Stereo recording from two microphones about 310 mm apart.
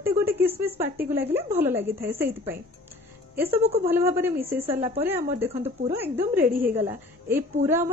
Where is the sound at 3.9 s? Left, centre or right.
Centre.